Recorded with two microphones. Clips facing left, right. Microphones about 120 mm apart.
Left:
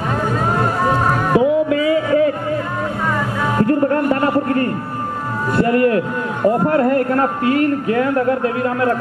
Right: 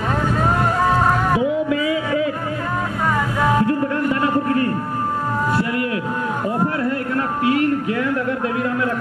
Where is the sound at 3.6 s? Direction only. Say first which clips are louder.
Left 4 dB; 45° left (ahead or behind).